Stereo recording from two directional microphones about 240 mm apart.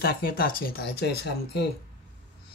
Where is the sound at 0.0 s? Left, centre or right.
Left.